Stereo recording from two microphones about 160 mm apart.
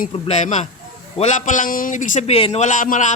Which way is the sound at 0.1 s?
45° left (ahead or behind).